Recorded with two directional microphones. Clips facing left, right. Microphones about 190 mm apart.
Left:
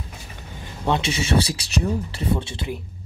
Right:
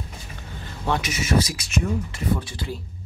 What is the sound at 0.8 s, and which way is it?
Speech, 25° left (ahead or behind).